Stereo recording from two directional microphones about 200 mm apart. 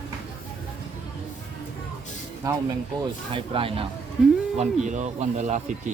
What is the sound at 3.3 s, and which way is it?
Speech, 25° right (ahead or behind).